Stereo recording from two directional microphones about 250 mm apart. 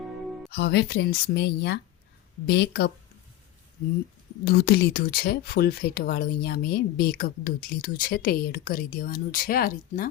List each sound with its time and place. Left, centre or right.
0.5 s speech: left
4.4 s speech: left